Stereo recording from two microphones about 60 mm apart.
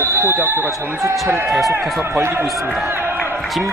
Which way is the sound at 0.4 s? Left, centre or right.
Right.